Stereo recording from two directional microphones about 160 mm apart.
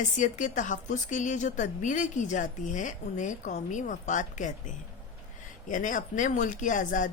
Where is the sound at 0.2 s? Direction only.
50° left (ahead or behind).